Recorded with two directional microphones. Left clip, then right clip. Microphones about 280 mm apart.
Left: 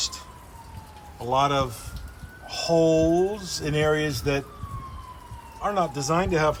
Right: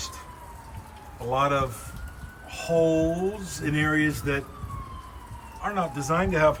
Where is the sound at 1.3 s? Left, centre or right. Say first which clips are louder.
Left 2 dB; centre.